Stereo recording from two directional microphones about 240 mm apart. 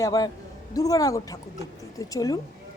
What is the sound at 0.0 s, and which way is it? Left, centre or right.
A woman's voice, centre.